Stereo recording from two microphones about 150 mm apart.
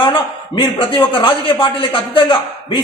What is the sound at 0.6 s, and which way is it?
A man's voice, 30° left (ahead or behind).